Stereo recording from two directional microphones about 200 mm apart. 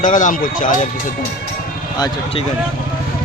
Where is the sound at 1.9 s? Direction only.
20° left (ahead or behind).